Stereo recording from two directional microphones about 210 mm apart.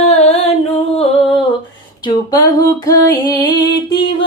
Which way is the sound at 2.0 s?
20° left (ahead or behind).